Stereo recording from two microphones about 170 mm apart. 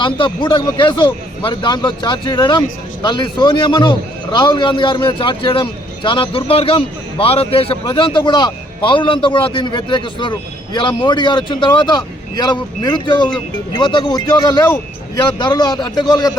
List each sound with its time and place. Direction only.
0.0 s a man's voice: 25° left (ahead or behind)